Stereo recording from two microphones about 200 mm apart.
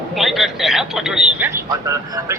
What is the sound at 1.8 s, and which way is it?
Speech, 15° right (ahead or behind).